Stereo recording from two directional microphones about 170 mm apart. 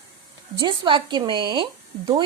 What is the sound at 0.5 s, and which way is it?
A woman's voice, 25° right (ahead or behind).